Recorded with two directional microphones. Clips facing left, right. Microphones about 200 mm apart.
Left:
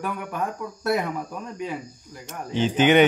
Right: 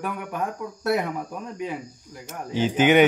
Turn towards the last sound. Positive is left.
turn(degrees=-10)  # may be behind; listen again after turning